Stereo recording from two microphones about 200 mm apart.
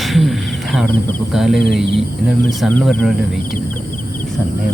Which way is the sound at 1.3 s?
Centre (ahead or behind).